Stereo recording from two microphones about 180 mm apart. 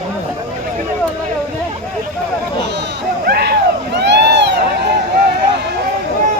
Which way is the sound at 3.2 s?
65° right (ahead or behind).